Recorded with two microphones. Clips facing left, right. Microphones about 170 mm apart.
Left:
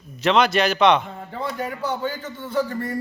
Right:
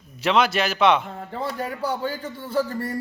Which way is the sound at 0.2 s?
5° right (ahead or behind).